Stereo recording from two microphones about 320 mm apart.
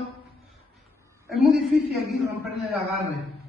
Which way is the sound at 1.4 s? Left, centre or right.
Centre.